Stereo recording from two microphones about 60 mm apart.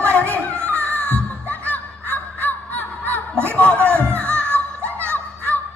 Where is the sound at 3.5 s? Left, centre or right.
Left.